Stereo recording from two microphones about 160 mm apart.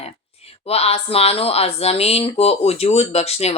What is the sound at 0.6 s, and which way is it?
Speech, 40° left (ahead or behind).